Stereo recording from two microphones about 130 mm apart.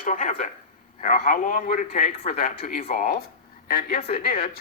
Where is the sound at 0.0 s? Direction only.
75° left (ahead or behind).